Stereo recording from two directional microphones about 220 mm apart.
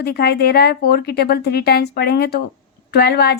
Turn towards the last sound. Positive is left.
turn(degrees=45)  # may be behind; listen again after turning